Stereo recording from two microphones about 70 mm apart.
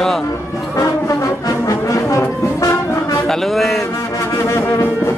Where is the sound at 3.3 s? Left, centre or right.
Centre.